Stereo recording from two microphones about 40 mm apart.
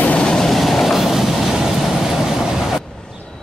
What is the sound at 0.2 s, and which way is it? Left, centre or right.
Train, centre.